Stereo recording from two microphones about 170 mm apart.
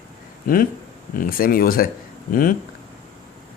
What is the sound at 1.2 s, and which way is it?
Speech, 60° left (ahead or behind).